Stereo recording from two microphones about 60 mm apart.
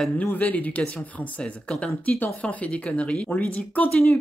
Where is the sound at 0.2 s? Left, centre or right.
Left.